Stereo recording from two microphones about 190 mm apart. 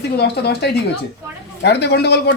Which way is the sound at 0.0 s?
55° left (ahead or behind).